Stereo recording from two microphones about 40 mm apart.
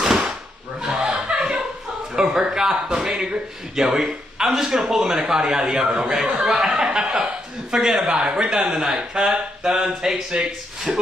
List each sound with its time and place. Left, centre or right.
0.0 s a sound: centre
0.7 s snicker: centre
1.2 s chuckle: centre
2.1 s a man's voice: centre